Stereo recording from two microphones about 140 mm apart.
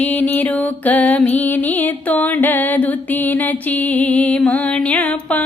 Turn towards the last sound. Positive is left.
turn(degrees=10)  # may be behind; listen again after turning